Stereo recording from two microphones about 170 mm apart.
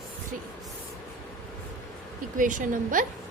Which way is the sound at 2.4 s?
50° right (ahead or behind).